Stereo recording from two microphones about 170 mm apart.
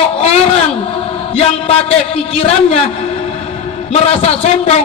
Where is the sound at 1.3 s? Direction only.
35° left (ahead or behind).